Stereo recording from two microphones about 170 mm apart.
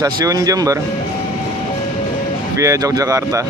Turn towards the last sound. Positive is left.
turn(degrees=-20)  # may be behind; listen again after turning